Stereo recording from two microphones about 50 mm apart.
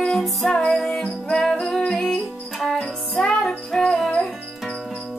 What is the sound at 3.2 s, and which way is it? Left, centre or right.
Music, centre.